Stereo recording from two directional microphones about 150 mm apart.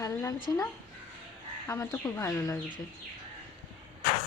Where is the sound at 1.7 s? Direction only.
20° left (ahead or behind).